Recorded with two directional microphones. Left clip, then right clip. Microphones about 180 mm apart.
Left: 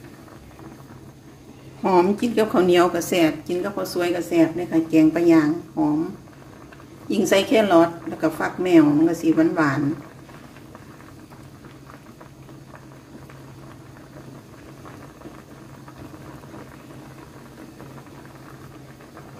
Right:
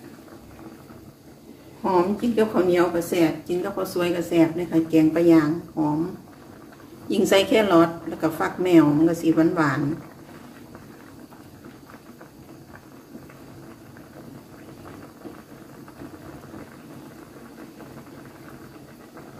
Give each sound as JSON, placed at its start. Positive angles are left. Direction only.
{"t": 1.8, "sound": "a woman's voice", "side_deg": 70}
{"t": 3.4, "sound": "a woman's voice", "side_deg": 25}
{"t": 7.1, "sound": "a woman's voice", "side_deg": 10}